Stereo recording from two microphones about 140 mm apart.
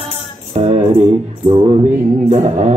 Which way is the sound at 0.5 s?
50° right (ahead or behind).